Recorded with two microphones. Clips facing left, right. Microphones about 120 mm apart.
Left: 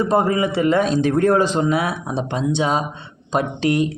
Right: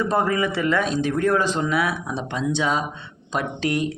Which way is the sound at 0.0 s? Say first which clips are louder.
Left 4 dB; 25° left (ahead or behind).